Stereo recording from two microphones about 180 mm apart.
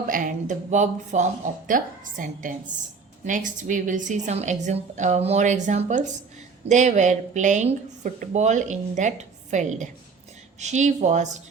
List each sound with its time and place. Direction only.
0.1 s a woman's voice: 45° right (ahead or behind)